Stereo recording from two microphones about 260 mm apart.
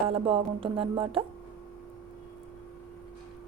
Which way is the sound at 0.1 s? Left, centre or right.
Right.